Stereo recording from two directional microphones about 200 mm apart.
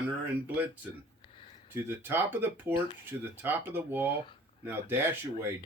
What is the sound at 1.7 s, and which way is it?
Speech, 10° right (ahead or behind).